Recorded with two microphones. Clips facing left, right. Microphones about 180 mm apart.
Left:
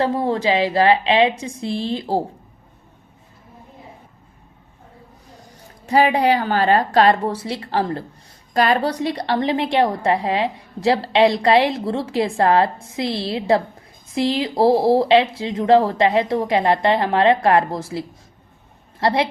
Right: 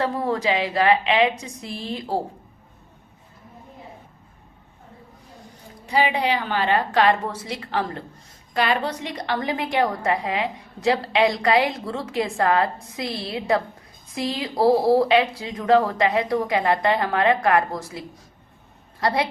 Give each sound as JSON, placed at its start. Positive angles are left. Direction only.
{"t": 0.0, "sound": "a woman's voice", "side_deg": 30}
{"t": 5.8, "sound": "a woman's voice", "side_deg": 45}